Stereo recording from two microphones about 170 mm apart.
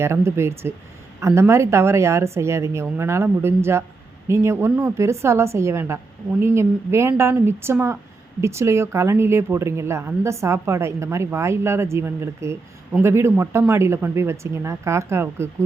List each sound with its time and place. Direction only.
0.0 s speech: 15° right (ahead or behind)